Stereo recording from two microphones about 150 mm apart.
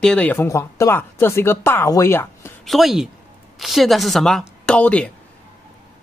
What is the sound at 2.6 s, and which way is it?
Speech, centre (ahead or behind).